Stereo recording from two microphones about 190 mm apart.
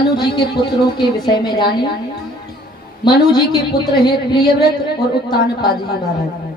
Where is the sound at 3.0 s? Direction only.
20° left (ahead or behind).